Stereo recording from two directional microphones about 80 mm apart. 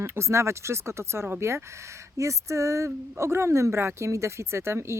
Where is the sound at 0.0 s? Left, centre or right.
Right.